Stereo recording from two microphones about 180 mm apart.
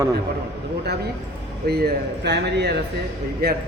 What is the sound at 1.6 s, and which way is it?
Speech, 60° right (ahead or behind).